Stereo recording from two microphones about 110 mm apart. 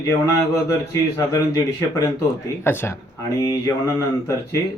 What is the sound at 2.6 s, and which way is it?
Speech, 20° left (ahead or behind).